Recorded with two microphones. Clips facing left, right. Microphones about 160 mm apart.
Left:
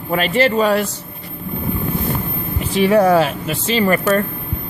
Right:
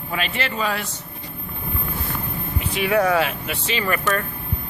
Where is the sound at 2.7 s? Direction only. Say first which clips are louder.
Left 7 dB; 35° left (ahead or behind).